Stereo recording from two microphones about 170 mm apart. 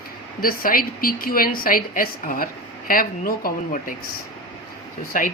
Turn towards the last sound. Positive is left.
turn(degrees=50)  # may be behind; listen again after turning